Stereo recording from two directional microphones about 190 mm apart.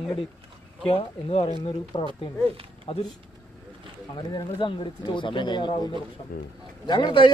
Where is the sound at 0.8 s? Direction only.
30° left (ahead or behind).